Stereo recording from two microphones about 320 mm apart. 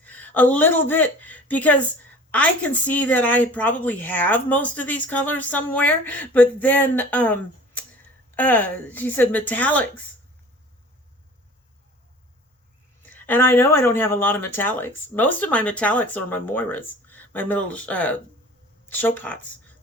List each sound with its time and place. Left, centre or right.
0.0 s a woman's voice: centre
13.0 s a woman's voice: centre